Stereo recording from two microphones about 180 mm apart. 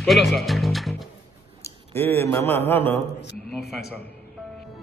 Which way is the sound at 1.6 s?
10° left (ahead or behind).